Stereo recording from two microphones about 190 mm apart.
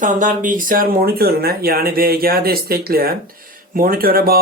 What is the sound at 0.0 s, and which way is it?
Speech, 45° right (ahead or behind).